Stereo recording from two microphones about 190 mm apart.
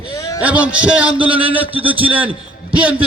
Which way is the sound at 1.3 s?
30° right (ahead or behind).